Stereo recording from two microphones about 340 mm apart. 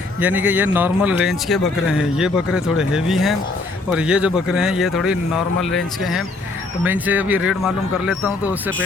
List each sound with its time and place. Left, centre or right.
0.2 s speech: centre